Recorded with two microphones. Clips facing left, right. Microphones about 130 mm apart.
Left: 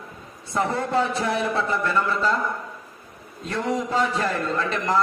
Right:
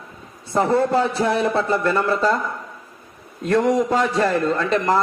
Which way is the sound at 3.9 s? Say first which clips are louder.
Right 5 dB; 40° right (ahead or behind).